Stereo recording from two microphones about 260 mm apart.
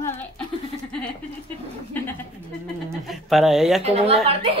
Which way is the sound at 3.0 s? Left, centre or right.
Centre.